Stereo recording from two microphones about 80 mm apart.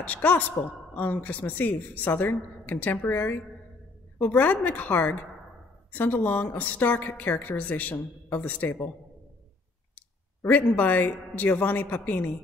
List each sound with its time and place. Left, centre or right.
0.0 s a woman's voice: centre
10.4 s a woman's voice: left